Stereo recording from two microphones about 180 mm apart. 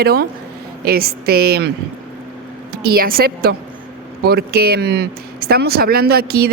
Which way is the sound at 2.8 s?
55° right (ahead or behind).